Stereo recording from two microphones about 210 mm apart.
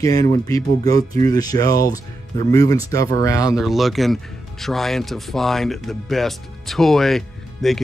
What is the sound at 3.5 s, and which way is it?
Speech, centre (ahead or behind).